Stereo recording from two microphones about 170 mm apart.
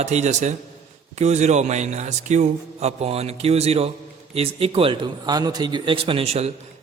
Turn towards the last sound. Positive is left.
turn(degrees=-35)  # may be behind; listen again after turning